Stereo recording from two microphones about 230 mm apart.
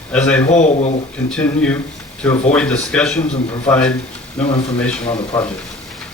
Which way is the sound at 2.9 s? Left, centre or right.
Centre.